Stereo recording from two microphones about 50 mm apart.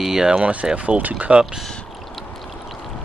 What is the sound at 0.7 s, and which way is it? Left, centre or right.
Speech, right.